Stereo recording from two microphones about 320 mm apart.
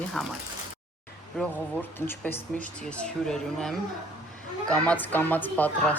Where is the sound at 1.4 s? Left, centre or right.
Centre.